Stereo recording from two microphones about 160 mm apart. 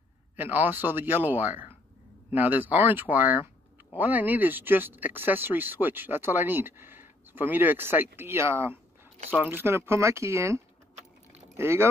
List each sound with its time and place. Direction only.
0.4 s speech: 10° right (ahead or behind)